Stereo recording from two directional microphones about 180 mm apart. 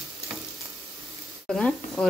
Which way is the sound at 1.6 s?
5° left (ahead or behind).